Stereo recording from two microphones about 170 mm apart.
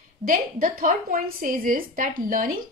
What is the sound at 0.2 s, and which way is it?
A woman's voice, 55° right (ahead or behind).